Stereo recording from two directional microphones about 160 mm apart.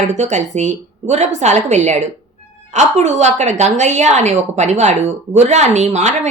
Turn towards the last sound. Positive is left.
turn(degrees=-45)  # may be behind; listen again after turning